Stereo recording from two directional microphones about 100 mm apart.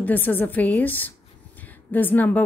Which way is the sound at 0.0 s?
20° left (ahead or behind).